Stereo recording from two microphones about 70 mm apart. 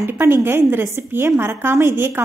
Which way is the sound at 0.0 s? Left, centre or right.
Right.